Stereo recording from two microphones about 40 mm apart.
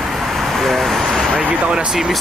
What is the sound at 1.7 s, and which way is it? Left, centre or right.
Speech, centre.